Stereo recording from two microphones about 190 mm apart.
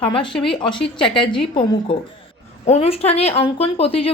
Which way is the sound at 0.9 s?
25° left (ahead or behind).